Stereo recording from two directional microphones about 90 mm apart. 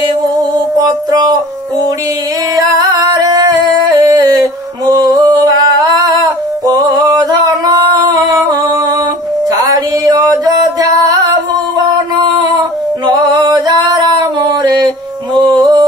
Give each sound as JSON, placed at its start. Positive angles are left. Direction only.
{"t": 0.0, "sound": "music", "side_deg": -50}
{"t": 2.5, "sound": "music", "side_deg": -45}
{"t": 9.5, "sound": "music", "side_deg": -45}
{"t": 13.0, "sound": "a sound", "side_deg": -55}
{"t": 15.3, "sound": "music", "side_deg": -50}